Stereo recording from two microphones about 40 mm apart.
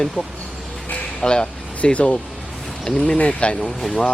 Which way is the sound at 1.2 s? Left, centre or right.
Left.